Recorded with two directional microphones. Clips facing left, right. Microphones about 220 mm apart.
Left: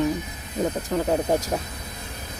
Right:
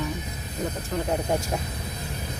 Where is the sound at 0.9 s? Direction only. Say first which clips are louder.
Left 4 dB; 40° left (ahead or behind).